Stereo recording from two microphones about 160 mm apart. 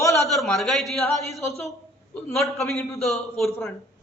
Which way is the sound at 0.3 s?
Centre (ahead or behind).